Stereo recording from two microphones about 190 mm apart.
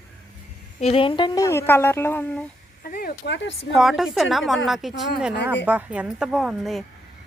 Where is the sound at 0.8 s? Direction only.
30° left (ahead or behind); by 2.5 s 10° left (ahead or behind).